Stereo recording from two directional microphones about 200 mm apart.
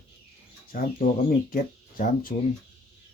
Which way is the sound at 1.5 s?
45° left (ahead or behind).